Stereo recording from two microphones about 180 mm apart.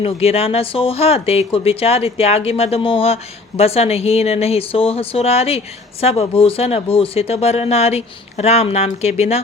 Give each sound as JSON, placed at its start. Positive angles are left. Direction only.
{"t": 0.0, "sound": "speech", "side_deg": 35}